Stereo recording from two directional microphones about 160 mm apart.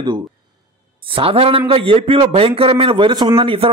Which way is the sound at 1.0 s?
35° right (ahead or behind).